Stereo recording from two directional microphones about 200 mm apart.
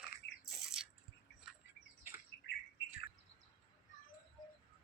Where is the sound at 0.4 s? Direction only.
Centre (ahead or behind).